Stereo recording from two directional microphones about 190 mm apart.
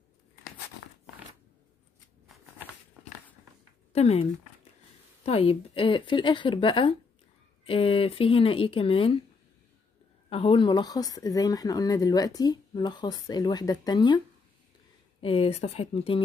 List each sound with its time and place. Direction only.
3.9 s speech: 35° left (ahead or behind)
10.3 s speech: 30° left (ahead or behind)